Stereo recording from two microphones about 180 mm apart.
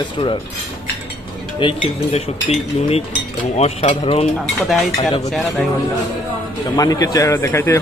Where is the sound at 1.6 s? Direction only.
30° left (ahead or behind).